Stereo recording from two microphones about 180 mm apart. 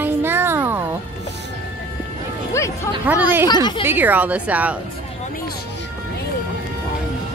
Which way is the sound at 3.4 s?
25° left (ahead or behind).